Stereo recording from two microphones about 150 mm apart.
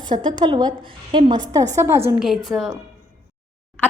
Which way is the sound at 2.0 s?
5° right (ahead or behind).